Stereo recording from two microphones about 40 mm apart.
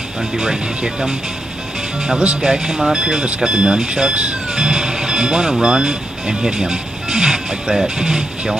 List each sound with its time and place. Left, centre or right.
0.4 s speech: centre
2.4 s speech: centre
4.1 s speech: right
4.6 s speech: centre